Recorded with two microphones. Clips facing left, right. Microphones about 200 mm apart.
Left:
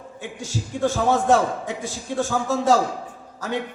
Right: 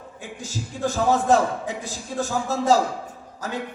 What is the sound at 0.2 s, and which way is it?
A man's voice, 40° right (ahead or behind).